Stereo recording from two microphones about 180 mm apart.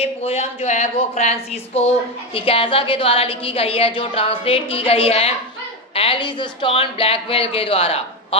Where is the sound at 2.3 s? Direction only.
30° left (ahead or behind).